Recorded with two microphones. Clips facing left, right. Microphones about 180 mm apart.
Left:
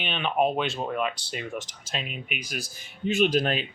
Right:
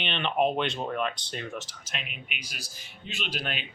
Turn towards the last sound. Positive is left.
turn(degrees=45)  # may be behind; listen again after turning